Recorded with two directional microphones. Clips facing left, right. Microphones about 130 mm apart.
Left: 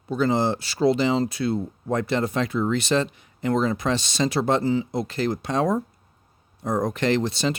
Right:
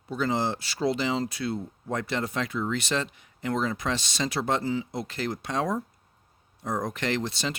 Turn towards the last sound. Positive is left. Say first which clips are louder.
# left 7 dB
turn(degrees=30)  # may be behind; listen again after turning